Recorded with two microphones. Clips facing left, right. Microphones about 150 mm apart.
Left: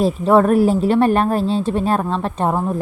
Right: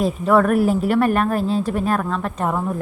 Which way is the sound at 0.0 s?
30° left (ahead or behind).